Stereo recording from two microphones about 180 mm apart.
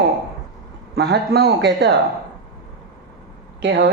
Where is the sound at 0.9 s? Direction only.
65° right (ahead or behind).